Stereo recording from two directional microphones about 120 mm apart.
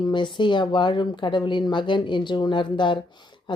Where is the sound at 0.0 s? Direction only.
40° left (ahead or behind).